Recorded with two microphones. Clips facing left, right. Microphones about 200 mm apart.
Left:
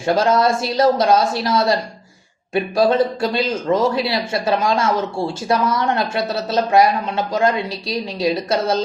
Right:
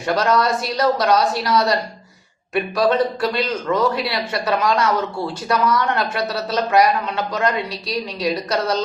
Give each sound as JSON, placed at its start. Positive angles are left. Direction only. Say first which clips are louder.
{"t": 0.0, "sound": "speech", "louder": "left 2 dB", "side_deg": 25}